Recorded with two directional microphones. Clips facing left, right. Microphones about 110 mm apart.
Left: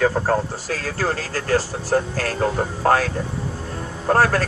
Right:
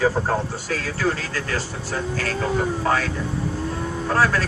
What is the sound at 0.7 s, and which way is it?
Speech, 40° left (ahead or behind).